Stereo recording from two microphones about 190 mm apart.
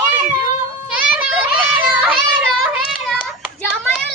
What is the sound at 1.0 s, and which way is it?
Children playing, 10° right (ahead or behind).